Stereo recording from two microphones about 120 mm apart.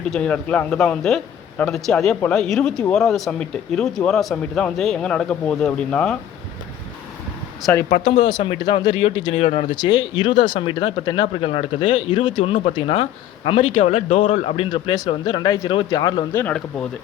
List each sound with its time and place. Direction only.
0.1 s speech: 10° left (ahead or behind)
7.9 s speech: 80° left
8.3 s speech: 40° left (ahead or behind)
9.4 s speech: 70° left (ahead or behind)
9.6 s speech: 40° left (ahead or behind); by 14.5 s 85° left
14.5 s speech: 45° left (ahead or behind)
16.3 s speech: 15° left (ahead or behind)